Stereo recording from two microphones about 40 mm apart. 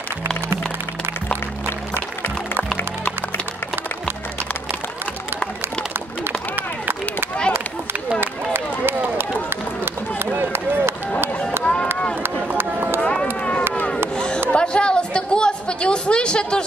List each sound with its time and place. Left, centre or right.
6.2 s run: right
10.1 s run: right
11.6 s run: left
12.2 s run: right
13.4 s run: left
14.1 s music: left
14.5 s a sound: left